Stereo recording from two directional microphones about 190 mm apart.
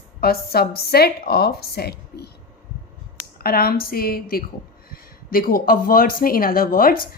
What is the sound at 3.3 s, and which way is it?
Speech, 55° left (ahead or behind).